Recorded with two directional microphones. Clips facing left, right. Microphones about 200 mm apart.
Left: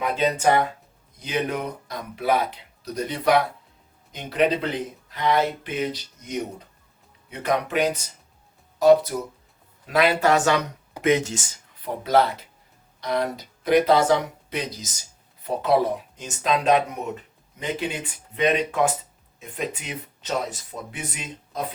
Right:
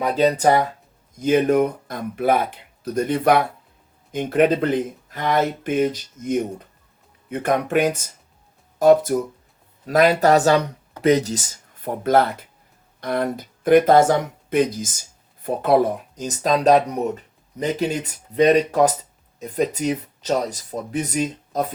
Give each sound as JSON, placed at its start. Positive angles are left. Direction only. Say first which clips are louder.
{"t": 0.0, "sound": "speech", "louder": "right 4 dB", "side_deg": -35}
{"t": 1.2, "sound": "speech", "louder": "right 10 dB", "side_deg": -50}